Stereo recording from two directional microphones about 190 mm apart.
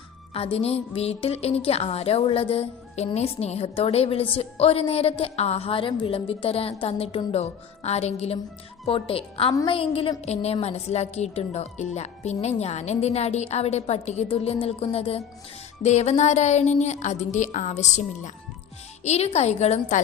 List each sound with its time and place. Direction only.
0.3 s a woman's voice: 30° left (ahead or behind)